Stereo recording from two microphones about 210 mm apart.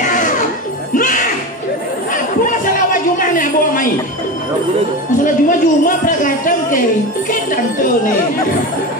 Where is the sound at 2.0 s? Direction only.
40° left (ahead or behind).